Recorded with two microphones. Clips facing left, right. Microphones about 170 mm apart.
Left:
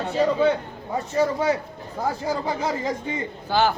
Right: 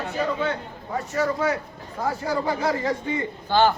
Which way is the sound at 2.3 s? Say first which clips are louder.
Right 4 dB; 20° left (ahead or behind).